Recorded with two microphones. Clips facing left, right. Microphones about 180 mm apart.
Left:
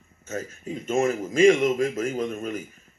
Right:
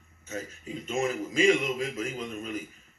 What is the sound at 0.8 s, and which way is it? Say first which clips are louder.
Speech: left 6 dB; 45° left (ahead or behind).